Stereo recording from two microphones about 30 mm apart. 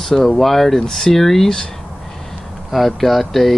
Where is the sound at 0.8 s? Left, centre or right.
Centre.